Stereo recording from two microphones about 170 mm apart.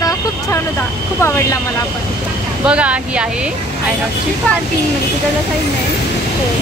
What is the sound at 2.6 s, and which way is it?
Speech, 5° right (ahead or behind).